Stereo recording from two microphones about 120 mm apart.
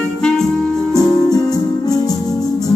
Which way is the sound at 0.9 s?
30° left (ahead or behind).